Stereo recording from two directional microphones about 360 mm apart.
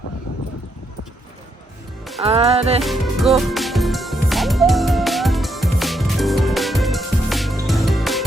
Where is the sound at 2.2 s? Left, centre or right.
Centre.